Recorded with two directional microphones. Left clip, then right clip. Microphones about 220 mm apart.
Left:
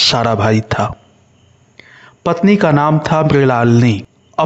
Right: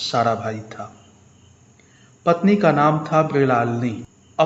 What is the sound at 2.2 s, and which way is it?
Speech, 50° left (ahead or behind).